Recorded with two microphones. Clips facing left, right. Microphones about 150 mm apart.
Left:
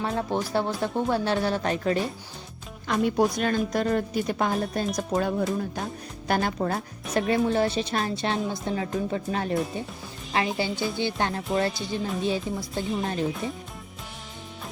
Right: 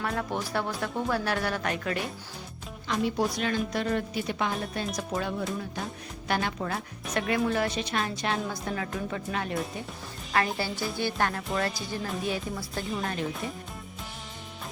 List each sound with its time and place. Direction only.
0.0 s a woman's voice: 30° left (ahead or behind)
2.8 s a woman's voice: 55° left (ahead or behind); by 9.8 s 35° left (ahead or behind)
10.3 s a woman's voice: 20° left (ahead or behind)
11.7 s music: centre (ahead or behind)
12.2 s a woman's voice: 25° left (ahead or behind)